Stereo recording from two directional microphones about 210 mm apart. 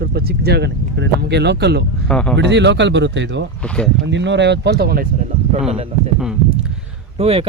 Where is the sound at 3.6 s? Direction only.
5° left (ahead or behind).